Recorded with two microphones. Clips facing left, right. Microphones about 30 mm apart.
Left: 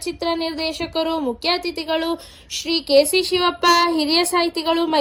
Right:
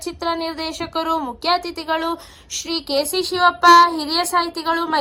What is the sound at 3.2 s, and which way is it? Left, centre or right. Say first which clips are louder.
Speech: left 2 dB; centre.